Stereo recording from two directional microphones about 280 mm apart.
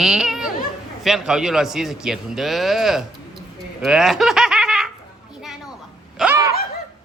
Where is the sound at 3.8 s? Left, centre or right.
Centre.